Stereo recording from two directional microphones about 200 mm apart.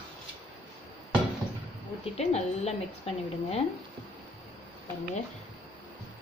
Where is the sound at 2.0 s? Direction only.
30° left (ahead or behind).